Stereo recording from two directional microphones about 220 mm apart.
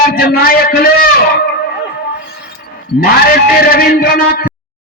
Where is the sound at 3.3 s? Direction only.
45° left (ahead or behind).